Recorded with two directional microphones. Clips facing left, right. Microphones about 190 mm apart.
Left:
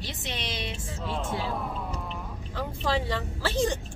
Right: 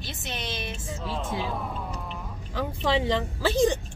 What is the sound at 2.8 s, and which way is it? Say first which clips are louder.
Speech: right 4 dB; 15° right (ahead or behind).